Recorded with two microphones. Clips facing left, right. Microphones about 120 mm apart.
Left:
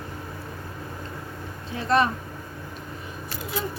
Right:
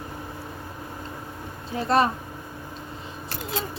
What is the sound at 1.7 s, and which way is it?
Speech, 35° right (ahead or behind).